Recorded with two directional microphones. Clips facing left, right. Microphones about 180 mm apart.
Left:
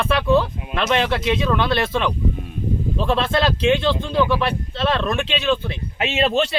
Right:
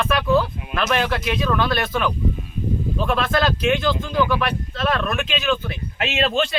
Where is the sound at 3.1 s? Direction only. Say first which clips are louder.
Left 1 dB; 30° left (ahead or behind).